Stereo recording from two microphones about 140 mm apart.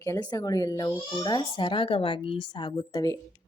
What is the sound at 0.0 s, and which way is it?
A woman's voice, 25° left (ahead or behind).